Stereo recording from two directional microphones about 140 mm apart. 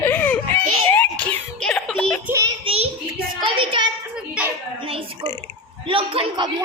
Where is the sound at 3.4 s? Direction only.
35° right (ahead or behind).